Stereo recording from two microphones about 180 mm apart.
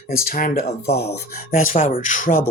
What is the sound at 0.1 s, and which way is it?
Speech, 55° left (ahead or behind).